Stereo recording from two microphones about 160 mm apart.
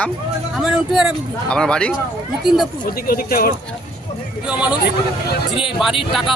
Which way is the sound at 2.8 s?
65° left (ahead or behind).